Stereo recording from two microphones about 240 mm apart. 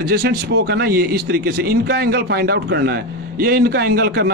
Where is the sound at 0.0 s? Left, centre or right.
Right.